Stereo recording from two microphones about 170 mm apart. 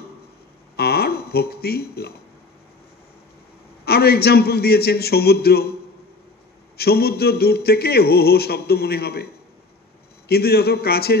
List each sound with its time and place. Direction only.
0.7 s a sound: 70° left (ahead or behind)
3.8 s speech: 65° left (ahead or behind)
6.8 s speech: 65° left (ahead or behind)